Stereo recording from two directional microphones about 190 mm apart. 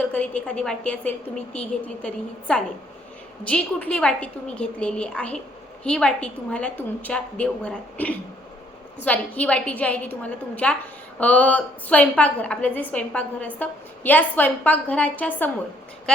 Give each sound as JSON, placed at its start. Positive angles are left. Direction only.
{"t": 0.0, "sound": "a woman's voice", "side_deg": 5}